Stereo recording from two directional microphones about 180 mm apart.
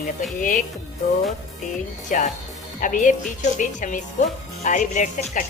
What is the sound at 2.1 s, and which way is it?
A woman's voice, 45° left (ahead or behind).